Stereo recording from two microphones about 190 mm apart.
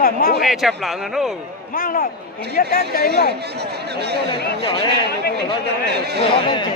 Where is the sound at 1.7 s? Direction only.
50° left (ahead or behind).